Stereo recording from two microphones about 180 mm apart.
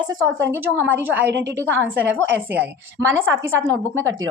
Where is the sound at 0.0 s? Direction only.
20° right (ahead or behind).